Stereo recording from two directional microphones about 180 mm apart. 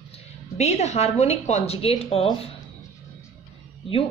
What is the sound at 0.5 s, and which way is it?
A woman's voice, 40° left (ahead or behind).